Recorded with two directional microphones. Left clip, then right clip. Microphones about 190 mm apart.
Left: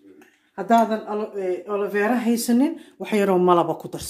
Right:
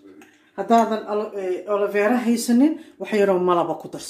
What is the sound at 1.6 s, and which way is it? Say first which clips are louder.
Speech: right 4 dB; 45° left (ahead or behind).